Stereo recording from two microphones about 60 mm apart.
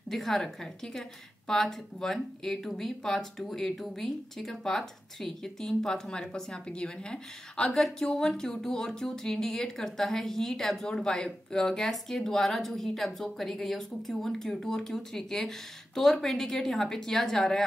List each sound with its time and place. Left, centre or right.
0.1 s a woman's voice: centre